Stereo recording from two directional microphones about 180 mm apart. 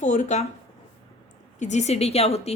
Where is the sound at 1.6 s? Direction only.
40° left (ahead or behind).